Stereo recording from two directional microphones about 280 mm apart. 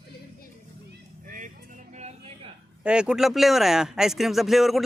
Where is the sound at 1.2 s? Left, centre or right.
Right.